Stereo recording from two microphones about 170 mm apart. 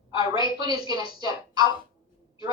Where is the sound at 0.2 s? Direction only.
25° right (ahead or behind).